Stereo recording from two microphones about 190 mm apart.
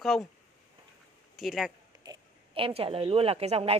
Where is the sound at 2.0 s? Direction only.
25° right (ahead or behind).